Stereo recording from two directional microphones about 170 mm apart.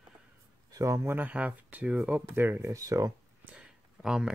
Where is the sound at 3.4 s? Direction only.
5° right (ahead or behind).